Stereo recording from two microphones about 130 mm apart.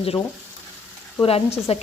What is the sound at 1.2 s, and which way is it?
Speech, 50° left (ahead or behind).